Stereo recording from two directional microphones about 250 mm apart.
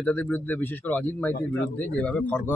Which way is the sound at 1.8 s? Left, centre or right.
Centre.